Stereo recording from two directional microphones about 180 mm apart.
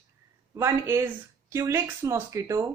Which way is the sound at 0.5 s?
15° right (ahead or behind).